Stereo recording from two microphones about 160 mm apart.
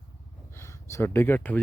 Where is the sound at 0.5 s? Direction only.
15° left (ahead or behind).